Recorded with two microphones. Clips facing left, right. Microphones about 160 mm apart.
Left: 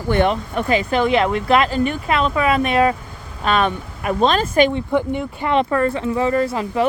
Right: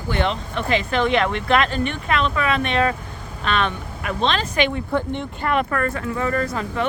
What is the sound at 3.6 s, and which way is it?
Speech, 40° left (ahead or behind).